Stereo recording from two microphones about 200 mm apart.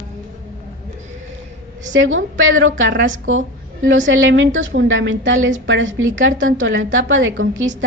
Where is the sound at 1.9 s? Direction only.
75° right (ahead or behind).